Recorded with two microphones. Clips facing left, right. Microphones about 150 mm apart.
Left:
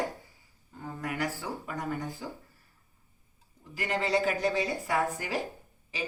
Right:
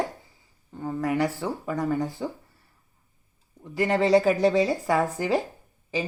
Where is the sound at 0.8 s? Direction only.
40° right (ahead or behind).